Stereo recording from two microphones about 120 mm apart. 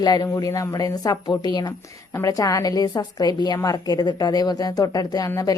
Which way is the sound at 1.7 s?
25° left (ahead or behind).